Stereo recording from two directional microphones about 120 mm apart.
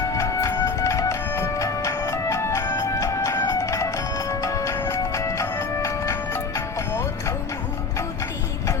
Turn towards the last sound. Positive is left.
turn(degrees=25)  # may be behind; listen again after turning